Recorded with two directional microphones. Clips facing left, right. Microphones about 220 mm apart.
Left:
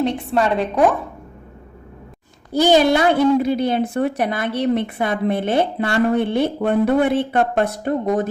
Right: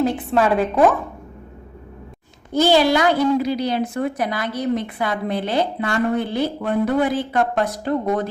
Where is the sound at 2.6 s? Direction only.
20° left (ahead or behind).